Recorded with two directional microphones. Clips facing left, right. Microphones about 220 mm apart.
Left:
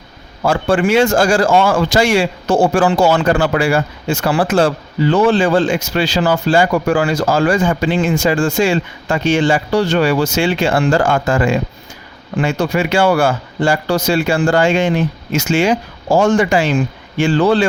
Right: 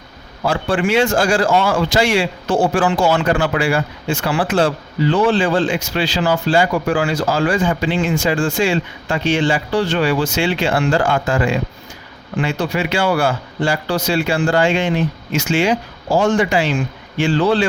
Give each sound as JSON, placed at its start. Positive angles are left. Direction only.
{"t": 0.4, "sound": "speech", "side_deg": 45}